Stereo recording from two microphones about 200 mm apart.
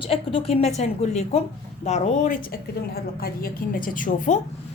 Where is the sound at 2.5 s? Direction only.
50° left (ahead or behind).